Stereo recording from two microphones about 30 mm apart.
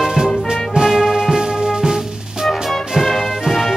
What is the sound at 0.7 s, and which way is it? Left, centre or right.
Music, centre.